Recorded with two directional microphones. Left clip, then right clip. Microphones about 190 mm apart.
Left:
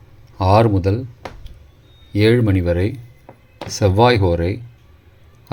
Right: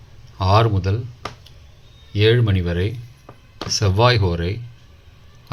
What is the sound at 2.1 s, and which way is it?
Speech, 35° left (ahead or behind).